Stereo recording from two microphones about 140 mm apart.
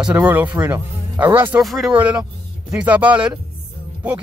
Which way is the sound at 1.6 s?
Centre (ahead or behind).